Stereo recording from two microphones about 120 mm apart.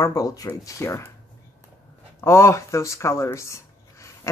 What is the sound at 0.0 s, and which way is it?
Speech, 30° left (ahead or behind).